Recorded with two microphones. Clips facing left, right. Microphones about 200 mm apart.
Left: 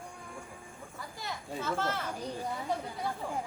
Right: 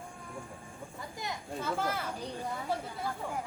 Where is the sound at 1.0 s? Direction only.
20° right (ahead or behind).